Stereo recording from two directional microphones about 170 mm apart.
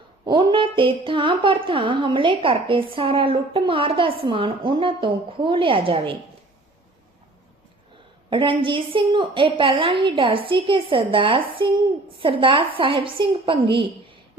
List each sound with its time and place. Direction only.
0.3 s speech: 30° right (ahead or behind)
8.3 s speech: 30° right (ahead or behind)